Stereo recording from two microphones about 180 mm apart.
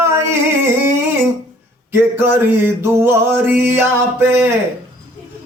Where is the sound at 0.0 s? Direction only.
15° right (ahead or behind).